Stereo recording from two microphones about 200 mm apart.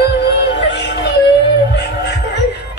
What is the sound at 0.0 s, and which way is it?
Music, 60° left (ahead or behind).